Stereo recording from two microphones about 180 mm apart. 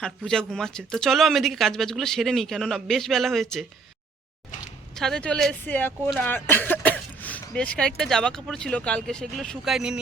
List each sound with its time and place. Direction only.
0.3 s speech: 5° left (ahead or behind)
4.9 s speech: 5° left (ahead or behind)